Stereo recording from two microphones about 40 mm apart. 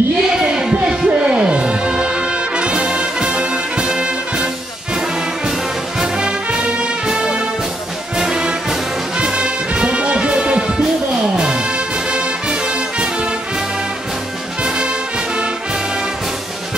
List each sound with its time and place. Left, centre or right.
0.3 s music: centre
2.5 s brass instrument: right
5.9 s music: right